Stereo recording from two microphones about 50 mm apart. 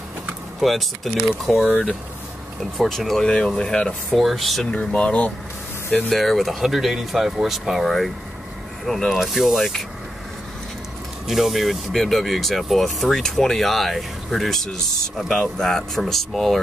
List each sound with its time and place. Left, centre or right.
0.6 s speech: centre
2.9 s speech: centre
3.3 s speech: centre
4.2 s speech: centre
4.6 s speech: left
6.0 s speech: centre
11.2 s speech: centre